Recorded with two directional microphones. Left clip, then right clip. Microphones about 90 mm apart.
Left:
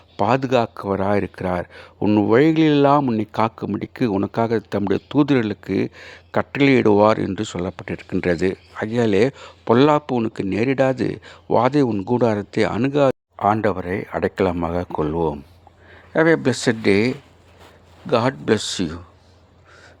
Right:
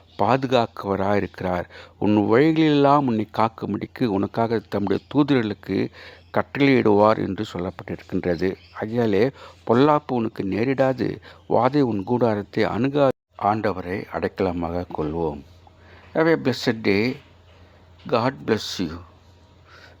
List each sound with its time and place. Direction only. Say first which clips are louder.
0.2 s speech: left 1 dB; 35° left (ahead or behind)
11.9 s speech: left 2 dB; 30° left (ahead or behind)
12.2 s speech: left 2 dB; 45° left (ahead or behind)
13.3 s speech: left 3 dB; 65° left (ahead or behind)
16.1 s speech: left 3 dB; 45° left (ahead or behind)